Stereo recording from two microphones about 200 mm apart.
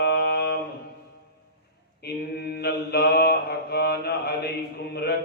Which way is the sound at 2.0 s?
55° left (ahead or behind).